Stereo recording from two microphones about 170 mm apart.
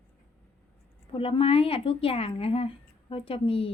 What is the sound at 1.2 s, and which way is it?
Speech, 35° left (ahead or behind).